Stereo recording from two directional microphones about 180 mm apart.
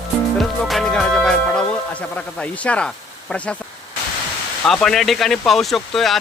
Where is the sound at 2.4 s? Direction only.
5° left (ahead or behind).